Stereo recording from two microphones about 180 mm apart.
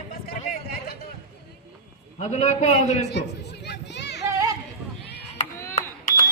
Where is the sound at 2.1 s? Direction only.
40° left (ahead or behind).